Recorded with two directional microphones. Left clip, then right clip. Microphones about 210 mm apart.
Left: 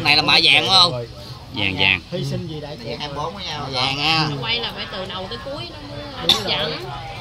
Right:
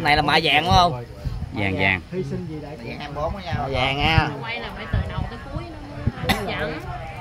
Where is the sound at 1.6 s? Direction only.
25° right (ahead or behind).